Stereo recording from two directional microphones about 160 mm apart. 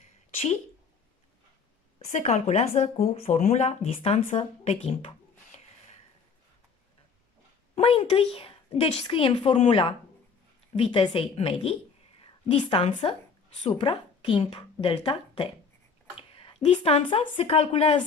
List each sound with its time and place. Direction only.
2.0 s speech: 45° left (ahead or behind)
7.7 s a woman's voice: 35° left (ahead or behind)
16.2 s a sound: 35° left (ahead or behind)
16.6 s a woman's voice: 40° left (ahead or behind)